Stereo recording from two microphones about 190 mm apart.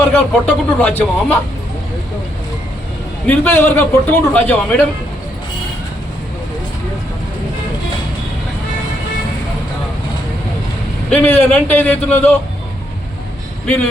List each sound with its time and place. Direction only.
0.1 s a man's voice: 5° left (ahead or behind)
3.2 s a man's voice: 10° left (ahead or behind)
11.1 s a man's voice: 10° left (ahead or behind)